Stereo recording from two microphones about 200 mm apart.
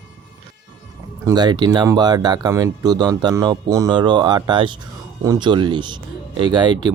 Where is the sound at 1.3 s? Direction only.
20° right (ahead or behind).